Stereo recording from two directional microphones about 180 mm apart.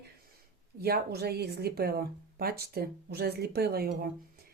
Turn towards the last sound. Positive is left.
turn(degrees=-60)  # may be behind; listen again after turning